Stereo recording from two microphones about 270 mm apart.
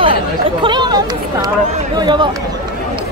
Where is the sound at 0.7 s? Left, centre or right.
Centre.